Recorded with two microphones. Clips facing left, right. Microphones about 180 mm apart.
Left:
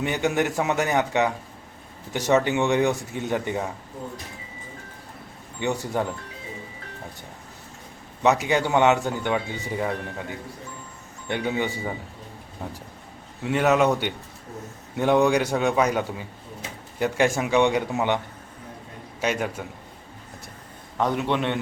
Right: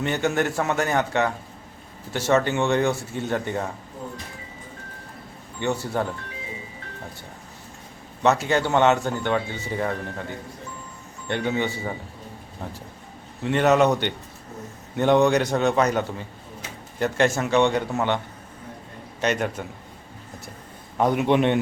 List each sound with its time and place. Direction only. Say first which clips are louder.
0.0 s speech: even; 15° left (ahead or behind)
5.5 s speech: even; 15° left (ahead or behind)
8.2 s speech: even; 15° left (ahead or behind)
13.4 s speech: right 2 dB; 5° left (ahead or behind)
19.2 s speech: right 2 dB; 5° left (ahead or behind)
21.0 s a man's voice: right 4 dB; 10° right (ahead or behind)